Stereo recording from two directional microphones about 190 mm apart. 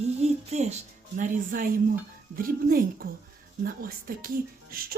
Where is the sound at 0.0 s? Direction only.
35° right (ahead or behind).